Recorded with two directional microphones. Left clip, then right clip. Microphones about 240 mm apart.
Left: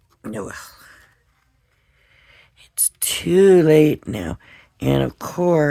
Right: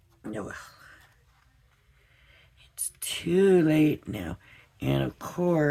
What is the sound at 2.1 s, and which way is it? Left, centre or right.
Speech, left.